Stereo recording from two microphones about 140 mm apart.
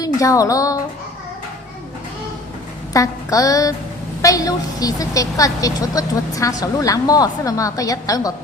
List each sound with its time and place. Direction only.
0.0 s speech: 25° left (ahead or behind)
2.9 s a woman's voice: 25° left (ahead or behind)